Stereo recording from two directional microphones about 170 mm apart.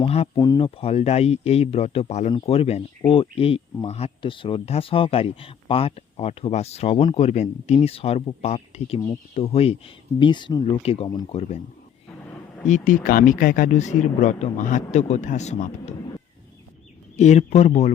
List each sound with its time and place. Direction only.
0.0 s speech: 35° left (ahead or behind)
0.3 s speech: 25° left (ahead or behind)
12.6 s speech: 50° left (ahead or behind)
17.2 s speech: 40° left (ahead or behind)